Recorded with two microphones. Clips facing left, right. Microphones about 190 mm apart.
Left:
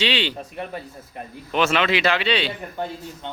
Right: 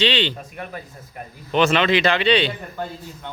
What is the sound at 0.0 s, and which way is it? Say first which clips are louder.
Speech: right 3 dB; 10° left (ahead or behind).